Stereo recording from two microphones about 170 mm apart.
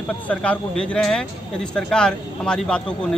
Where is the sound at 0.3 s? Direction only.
5° left (ahead or behind).